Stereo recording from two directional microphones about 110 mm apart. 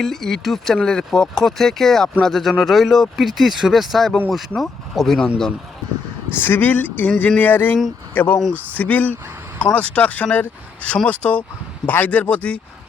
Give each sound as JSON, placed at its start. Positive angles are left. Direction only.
{"t": 0.0, "sound": "speech", "side_deg": 5}
{"t": 6.3, "sound": "speech", "side_deg": 20}